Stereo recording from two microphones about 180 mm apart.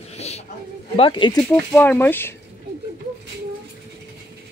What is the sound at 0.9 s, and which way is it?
Speech, 30° left (ahead or behind).